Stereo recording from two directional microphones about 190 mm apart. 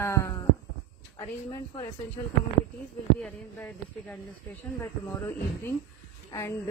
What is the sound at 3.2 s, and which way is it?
Speech, 5° left (ahead or behind).